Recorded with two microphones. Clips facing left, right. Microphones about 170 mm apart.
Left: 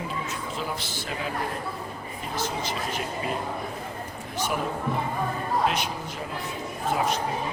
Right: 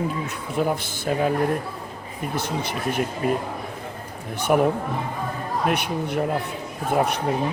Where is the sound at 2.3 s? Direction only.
60° right (ahead or behind).